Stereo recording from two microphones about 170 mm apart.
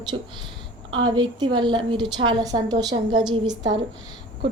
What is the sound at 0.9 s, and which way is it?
A woman's voice, 25° right (ahead or behind).